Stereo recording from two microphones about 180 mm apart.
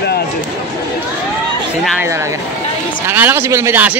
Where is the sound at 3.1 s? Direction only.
10° right (ahead or behind).